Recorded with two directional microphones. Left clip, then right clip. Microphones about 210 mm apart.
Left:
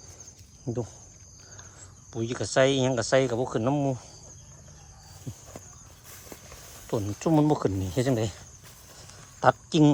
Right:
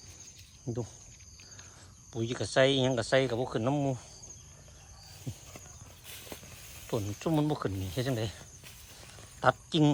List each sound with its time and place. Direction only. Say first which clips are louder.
0.6 s speech: left 5 dB; centre (ahead or behind)
2.1 s speech: left 3 dB; 5° left (ahead or behind)
6.8 s speech: left 5 dB; 10° left (ahead or behind)
9.4 s speech: left 5 dB; 15° left (ahead or behind)